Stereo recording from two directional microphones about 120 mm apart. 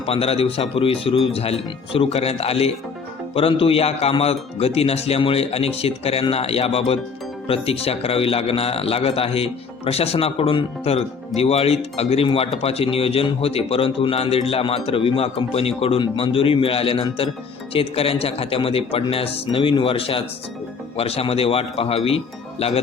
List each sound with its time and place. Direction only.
0.0 s a man's voice: 55° left (ahead or behind)